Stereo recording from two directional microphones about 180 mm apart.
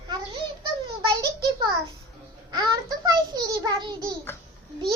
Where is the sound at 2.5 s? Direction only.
20° right (ahead or behind).